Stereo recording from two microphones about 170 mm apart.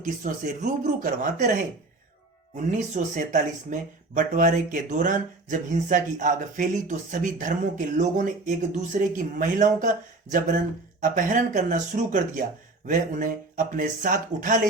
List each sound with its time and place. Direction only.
0.0 s speech: 50° right (ahead or behind)
2.6 s speech: 45° right (ahead or behind)